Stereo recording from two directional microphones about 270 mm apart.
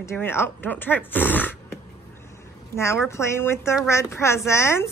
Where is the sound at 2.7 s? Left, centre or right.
Centre.